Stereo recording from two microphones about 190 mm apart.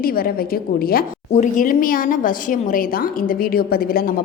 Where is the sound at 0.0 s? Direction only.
50° left (ahead or behind).